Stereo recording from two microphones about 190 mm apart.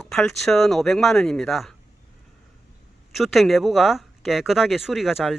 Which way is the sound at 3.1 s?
Centre (ahead or behind).